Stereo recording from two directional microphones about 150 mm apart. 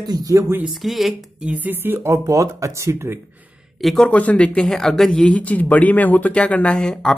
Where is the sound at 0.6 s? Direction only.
Centre (ahead or behind); by 3.2 s 20° right (ahead or behind).